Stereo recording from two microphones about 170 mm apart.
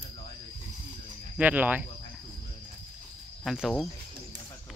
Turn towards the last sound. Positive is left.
turn(degrees=0)  # may be behind; listen again after turning